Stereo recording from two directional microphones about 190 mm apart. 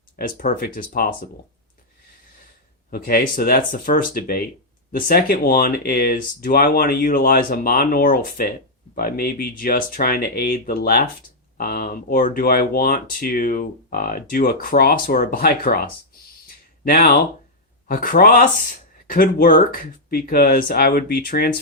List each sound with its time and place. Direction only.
0.2 s speech: 45° left (ahead or behind)
2.9 s speech: 50° left (ahead or behind)
16.9 s speech: 55° left (ahead or behind)